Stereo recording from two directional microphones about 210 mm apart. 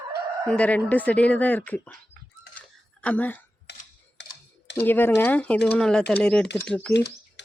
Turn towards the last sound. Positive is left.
turn(degrees=5)  # may be behind; listen again after turning